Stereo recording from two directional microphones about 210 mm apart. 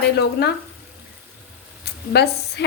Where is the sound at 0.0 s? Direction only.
50° left (ahead or behind).